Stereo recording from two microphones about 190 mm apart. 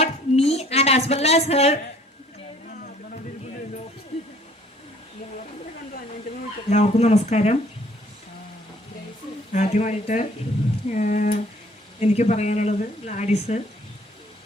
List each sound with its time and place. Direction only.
0.0 s a sound: 35° left (ahead or behind)
6.7 s speech: 35° left (ahead or behind)
9.5 s speech: 40° left (ahead or behind)